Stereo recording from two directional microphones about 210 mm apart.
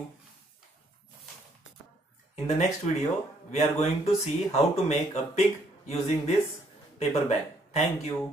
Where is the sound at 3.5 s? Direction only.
30° left (ahead or behind).